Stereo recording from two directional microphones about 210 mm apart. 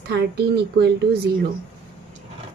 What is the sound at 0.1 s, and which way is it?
Speech, 50° right (ahead or behind).